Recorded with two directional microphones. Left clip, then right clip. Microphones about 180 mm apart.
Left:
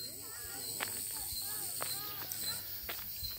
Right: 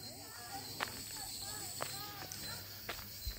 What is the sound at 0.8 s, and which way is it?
Cricket, 5° left (ahead or behind).